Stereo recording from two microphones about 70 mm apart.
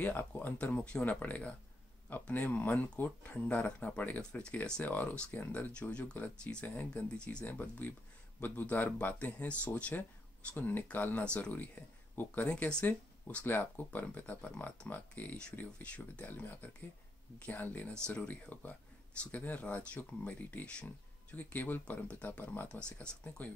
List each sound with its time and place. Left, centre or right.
0.0 s speech: left
4.2 s speech: centre
4.8 s speech: left
12.4 s speech: centre
18.0 s speech: centre
18.3 s speech: left